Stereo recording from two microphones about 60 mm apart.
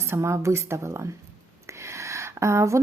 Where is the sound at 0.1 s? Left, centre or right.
Right.